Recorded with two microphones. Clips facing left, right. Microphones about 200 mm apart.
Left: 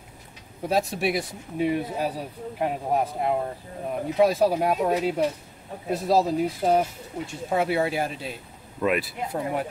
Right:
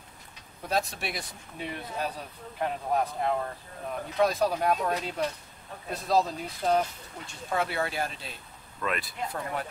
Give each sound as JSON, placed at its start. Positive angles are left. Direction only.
{"t": 0.7, "sound": "speech", "side_deg": 5}